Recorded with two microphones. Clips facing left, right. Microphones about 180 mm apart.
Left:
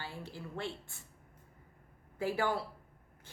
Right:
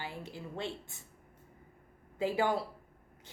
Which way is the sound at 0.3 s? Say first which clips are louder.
Even; 20° right (ahead or behind).